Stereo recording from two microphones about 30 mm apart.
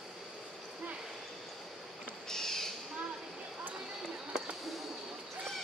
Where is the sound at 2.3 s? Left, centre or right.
Centre.